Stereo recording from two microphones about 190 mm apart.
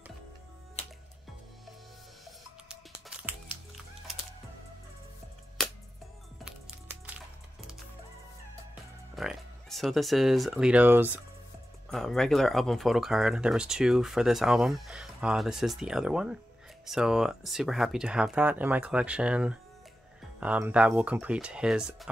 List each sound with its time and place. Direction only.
0.8 s music: 35° left (ahead or behind)
5.6 s music: centre (ahead or behind)
9.1 s speech: centre (ahead or behind)
11.9 s speech: centre (ahead or behind)